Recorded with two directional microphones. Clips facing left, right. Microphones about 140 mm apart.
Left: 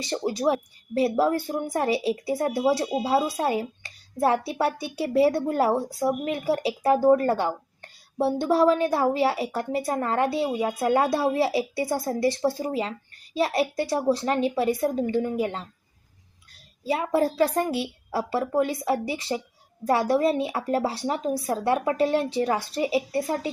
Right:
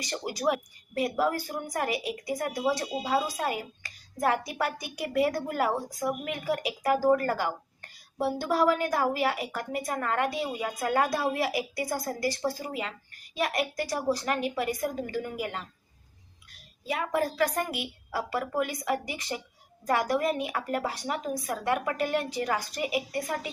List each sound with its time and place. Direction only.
0.0 s a woman's voice: 25° left (ahead or behind)
16.8 s a woman's voice: 30° left (ahead or behind)